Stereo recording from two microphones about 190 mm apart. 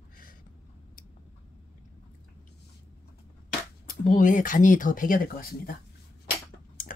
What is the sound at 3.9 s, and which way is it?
Speech, 45° left (ahead or behind).